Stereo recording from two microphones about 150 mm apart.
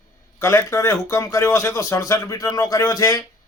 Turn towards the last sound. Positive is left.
turn(degrees=20)  # may be behind; listen again after turning